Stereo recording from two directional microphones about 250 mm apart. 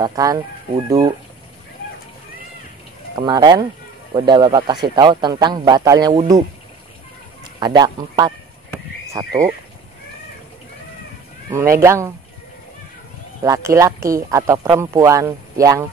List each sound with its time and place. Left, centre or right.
0.0 s speech: centre
3.2 s speech: centre
7.6 s speech: centre
11.5 s speech: centre
13.4 s speech: centre